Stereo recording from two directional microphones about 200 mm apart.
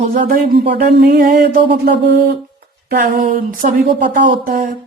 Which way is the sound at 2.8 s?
55° right (ahead or behind).